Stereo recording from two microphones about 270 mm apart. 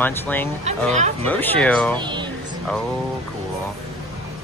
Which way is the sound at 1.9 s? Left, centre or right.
Centre.